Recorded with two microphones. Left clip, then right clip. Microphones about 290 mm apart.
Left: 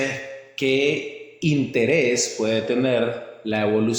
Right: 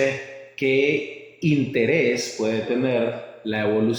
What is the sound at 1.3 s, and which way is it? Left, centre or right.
Speech, centre.